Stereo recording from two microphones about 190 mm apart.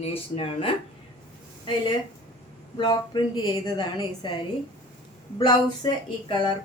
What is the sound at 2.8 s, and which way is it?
Speech, 25° left (ahead or behind).